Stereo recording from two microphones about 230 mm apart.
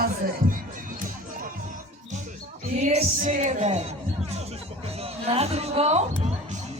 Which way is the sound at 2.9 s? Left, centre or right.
Right.